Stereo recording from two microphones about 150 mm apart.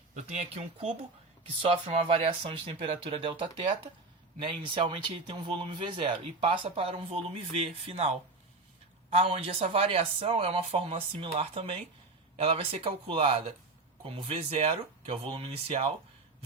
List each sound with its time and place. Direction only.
0.1 s speech: 50° right (ahead or behind)
4.6 s speech: 35° right (ahead or behind)